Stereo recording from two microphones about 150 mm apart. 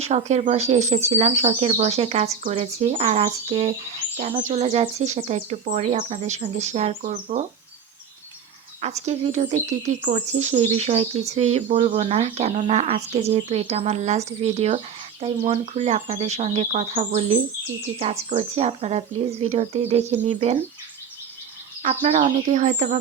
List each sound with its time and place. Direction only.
0.0 s speech: 50° right (ahead or behind)
8.8 s speech: 45° right (ahead or behind)
21.8 s speech: 50° right (ahead or behind)